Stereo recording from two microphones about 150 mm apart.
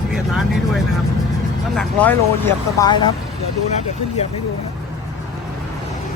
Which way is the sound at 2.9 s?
30° left (ahead or behind).